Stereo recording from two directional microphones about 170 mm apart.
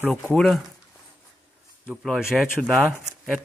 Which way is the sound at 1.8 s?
Centre (ahead or behind).